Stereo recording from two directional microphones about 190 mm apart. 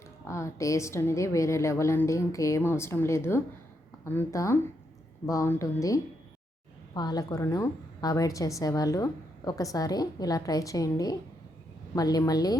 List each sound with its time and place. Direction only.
0.3 s a woman's voice: 15° left (ahead or behind)